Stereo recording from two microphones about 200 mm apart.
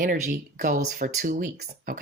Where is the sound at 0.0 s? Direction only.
45° right (ahead or behind).